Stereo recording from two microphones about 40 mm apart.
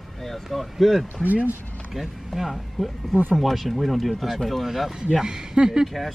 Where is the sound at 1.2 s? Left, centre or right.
Right.